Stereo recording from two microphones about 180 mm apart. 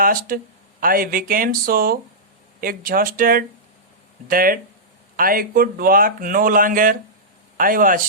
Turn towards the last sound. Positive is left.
turn(degrees=-50)  # may be behind; listen again after turning